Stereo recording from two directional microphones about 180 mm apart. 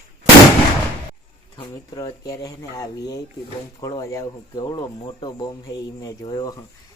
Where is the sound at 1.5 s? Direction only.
25° left (ahead or behind).